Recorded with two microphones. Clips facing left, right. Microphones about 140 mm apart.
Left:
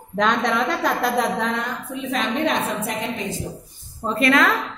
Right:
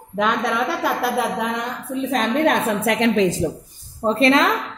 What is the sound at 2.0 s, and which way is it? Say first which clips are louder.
A woman's voice: right 4 dB; 45° right (ahead or behind).